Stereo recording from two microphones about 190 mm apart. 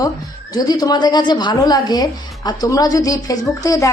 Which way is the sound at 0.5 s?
20° left (ahead or behind).